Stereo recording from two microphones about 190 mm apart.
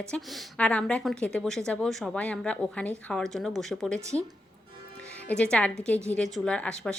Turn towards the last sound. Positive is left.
turn(degrees=5)  # may be behind; listen again after turning